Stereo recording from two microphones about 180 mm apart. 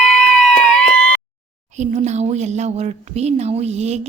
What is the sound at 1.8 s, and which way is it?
Speech, 40° right (ahead or behind).